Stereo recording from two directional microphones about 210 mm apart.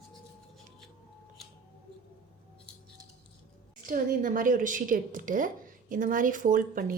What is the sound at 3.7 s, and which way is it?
A woman's voice, 40° right (ahead or behind).